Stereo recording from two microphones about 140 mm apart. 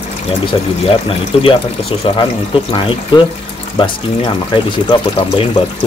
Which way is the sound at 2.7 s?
35° left (ahead or behind).